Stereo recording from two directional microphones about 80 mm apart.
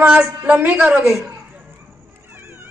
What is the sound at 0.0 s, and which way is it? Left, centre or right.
A man's voice, centre.